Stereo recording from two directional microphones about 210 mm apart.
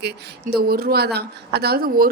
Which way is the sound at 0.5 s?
45° right (ahead or behind).